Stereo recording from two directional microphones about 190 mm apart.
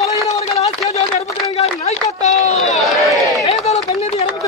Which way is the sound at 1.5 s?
35° left (ahead or behind).